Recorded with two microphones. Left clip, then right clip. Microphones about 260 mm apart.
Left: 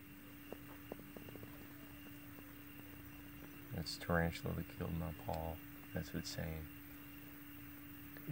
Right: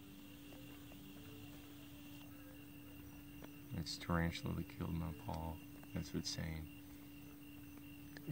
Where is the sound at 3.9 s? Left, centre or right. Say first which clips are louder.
Left 4 dB; centre.